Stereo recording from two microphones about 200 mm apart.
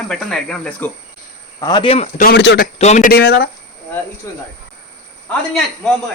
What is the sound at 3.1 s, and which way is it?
Speech, 50° left (ahead or behind).